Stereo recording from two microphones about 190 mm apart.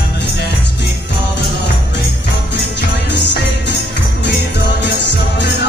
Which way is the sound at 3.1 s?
65° left (ahead or behind).